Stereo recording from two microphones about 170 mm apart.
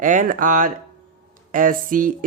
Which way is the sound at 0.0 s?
50° right (ahead or behind).